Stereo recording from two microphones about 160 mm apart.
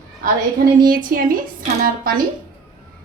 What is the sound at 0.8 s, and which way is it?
A woman's voice, 60° right (ahead or behind).